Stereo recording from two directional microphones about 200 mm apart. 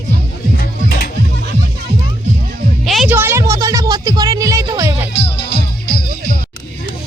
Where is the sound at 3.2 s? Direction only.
10° right (ahead or behind).